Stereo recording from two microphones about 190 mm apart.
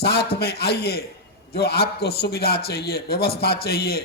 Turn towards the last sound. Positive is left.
turn(degrees=55)  # may be behind; listen again after turning